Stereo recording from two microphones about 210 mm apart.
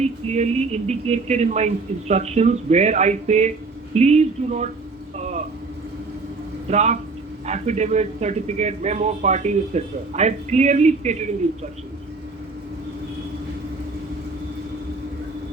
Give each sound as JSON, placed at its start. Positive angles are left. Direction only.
{"t": 0.0, "sound": "speech", "side_deg": -30}
{"t": 5.1, "sound": "vehicle", "side_deg": -35}
{"t": 6.7, "sound": "speech", "side_deg": -30}